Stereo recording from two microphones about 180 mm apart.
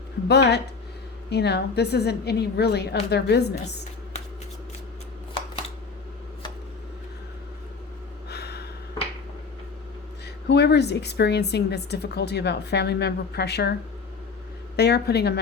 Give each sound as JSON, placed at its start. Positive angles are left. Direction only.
{"t": 0.3, "sound": "a woman's voice", "side_deg": 70}
{"t": 8.3, "sound": "gasp", "side_deg": 65}
{"t": 10.5, "sound": "a woman's voice", "side_deg": 70}
{"t": 14.8, "sound": "a woman's voice", "side_deg": 65}